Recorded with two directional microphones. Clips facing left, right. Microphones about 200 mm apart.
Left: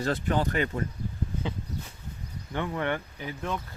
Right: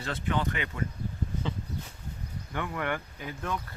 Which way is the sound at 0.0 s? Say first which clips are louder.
Left 4 dB; 40° left (ahead or behind).